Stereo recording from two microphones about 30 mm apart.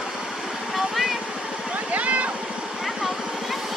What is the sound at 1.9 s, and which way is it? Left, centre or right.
Vehicle, right.